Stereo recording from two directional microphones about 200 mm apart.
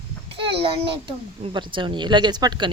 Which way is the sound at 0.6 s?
25° right (ahead or behind).